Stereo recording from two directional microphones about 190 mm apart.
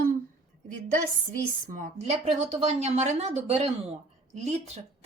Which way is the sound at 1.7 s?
45° right (ahead or behind).